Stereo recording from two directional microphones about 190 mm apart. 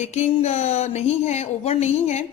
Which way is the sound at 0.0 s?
35° left (ahead or behind).